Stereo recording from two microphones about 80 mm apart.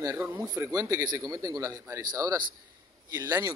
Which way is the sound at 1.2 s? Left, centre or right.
Right.